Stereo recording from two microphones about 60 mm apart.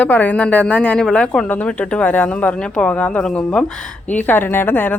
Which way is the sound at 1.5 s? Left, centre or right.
Left.